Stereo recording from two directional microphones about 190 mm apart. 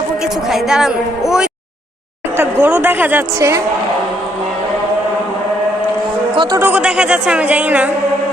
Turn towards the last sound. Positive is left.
turn(degrees=-10)  # may be behind; listen again after turning